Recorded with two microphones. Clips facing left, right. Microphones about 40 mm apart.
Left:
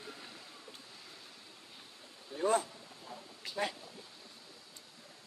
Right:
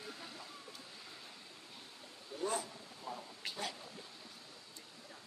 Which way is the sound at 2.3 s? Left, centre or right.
Left.